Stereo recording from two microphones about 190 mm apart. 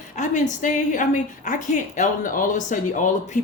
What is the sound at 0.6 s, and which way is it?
A woman's voice, 40° left (ahead or behind).